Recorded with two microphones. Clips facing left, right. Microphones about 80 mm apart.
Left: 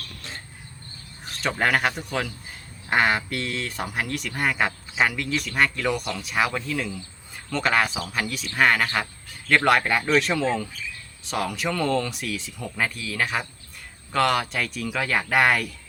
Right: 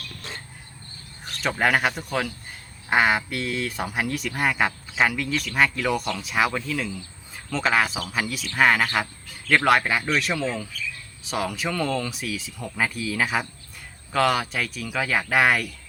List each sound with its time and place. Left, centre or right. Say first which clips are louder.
1.4 s speech: right 1 dB; centre